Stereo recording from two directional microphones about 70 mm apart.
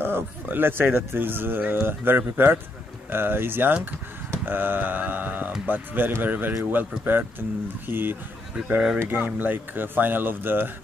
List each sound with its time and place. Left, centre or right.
0.0 s speech: right